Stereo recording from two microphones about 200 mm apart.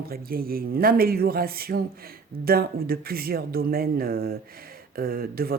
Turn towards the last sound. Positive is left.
turn(degrees=-50)  # may be behind; listen again after turning